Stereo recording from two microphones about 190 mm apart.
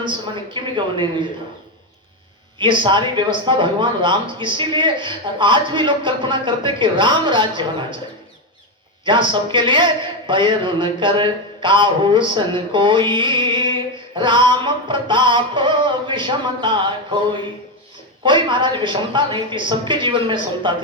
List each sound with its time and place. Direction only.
0.0 s speech: 25° right (ahead or behind)
2.6 s speech: 25° right (ahead or behind)
9.0 s speech: 25° right (ahead or behind)
18.2 s speech: 25° right (ahead or behind)